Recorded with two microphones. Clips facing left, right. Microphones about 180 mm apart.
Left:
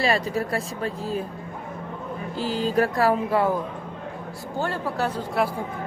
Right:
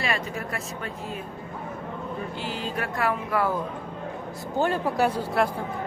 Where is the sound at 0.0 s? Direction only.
35° left (ahead or behind).